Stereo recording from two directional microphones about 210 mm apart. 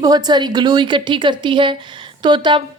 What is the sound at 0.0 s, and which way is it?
A woman's voice, 20° right (ahead or behind).